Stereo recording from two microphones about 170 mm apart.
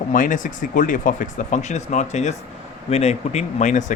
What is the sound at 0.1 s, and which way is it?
Speech, 50° left (ahead or behind).